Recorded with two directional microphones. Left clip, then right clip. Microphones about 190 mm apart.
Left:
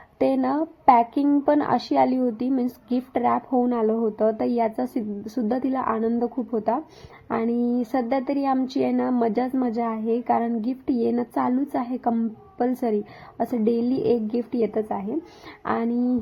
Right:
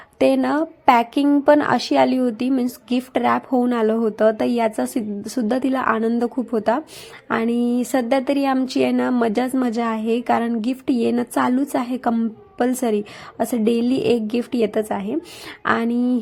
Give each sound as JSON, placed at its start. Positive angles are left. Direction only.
{"t": 0.2, "sound": "a woman's voice", "side_deg": -15}